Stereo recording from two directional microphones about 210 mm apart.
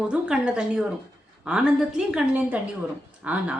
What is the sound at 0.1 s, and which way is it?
A woman's voice, 5° right (ahead or behind).